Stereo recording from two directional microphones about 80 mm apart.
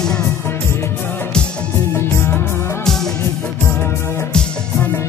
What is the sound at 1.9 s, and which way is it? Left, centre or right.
Music, left.